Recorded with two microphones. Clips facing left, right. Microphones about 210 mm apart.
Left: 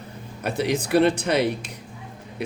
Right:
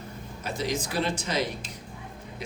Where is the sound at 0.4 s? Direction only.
65° left (ahead or behind).